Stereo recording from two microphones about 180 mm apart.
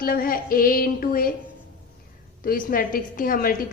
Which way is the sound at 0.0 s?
55° left (ahead or behind).